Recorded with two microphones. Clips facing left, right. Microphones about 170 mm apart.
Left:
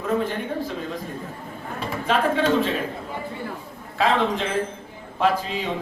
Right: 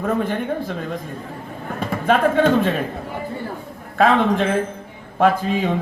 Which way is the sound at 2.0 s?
55° right (ahead or behind).